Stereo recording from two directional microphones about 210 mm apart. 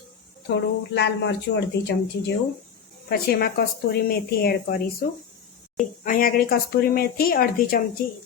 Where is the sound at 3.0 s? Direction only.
50° left (ahead or behind).